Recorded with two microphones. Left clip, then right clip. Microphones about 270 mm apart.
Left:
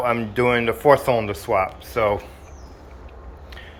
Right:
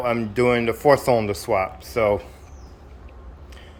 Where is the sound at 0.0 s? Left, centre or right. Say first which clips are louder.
Left 1 dB; centre.